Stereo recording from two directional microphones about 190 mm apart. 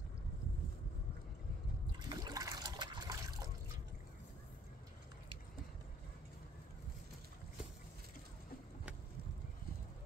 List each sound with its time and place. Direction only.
2.0 s trickle: 20° right (ahead or behind)